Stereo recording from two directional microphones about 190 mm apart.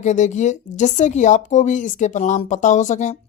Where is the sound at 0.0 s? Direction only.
40° left (ahead or behind).